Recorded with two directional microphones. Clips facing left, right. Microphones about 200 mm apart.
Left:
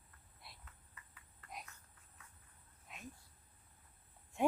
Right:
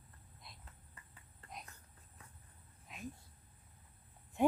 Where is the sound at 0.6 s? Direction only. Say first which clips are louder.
Right 2 dB; 30° right (ahead or behind).